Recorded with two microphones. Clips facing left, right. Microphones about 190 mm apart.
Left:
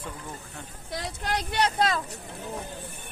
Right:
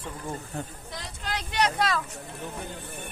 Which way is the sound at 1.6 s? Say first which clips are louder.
Even; 30° left (ahead or behind).